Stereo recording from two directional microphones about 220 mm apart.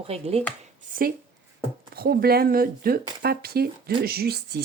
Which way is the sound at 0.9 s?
35° right (ahead or behind).